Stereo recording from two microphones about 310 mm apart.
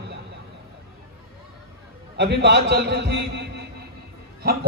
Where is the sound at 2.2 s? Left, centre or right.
Right.